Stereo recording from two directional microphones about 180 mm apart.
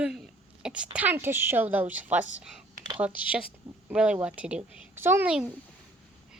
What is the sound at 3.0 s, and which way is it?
A woman's voice, 10° right (ahead or behind).